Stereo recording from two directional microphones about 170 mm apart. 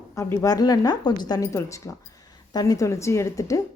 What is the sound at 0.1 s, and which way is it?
A woman's voice, 15° left (ahead or behind).